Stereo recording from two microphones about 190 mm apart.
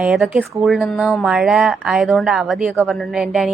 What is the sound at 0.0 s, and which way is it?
A woman's voice, 5° right (ahead or behind).